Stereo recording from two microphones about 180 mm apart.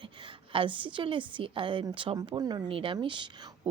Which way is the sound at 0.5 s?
30° right (ahead or behind).